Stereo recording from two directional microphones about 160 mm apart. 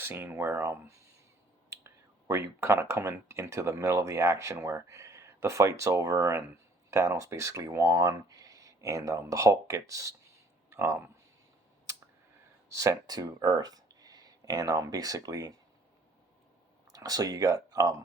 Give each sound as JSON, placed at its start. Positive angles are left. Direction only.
{"t": 0.0, "sound": "speech", "side_deg": -15}
{"t": 1.7, "sound": "whispering", "side_deg": -20}
{"t": 2.6, "sound": "speech", "side_deg": -15}
{"t": 12.7, "sound": "speech", "side_deg": -20}
{"t": 16.9, "sound": "speech", "side_deg": -25}